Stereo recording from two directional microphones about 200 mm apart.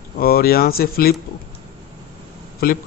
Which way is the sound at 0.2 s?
50° left (ahead or behind).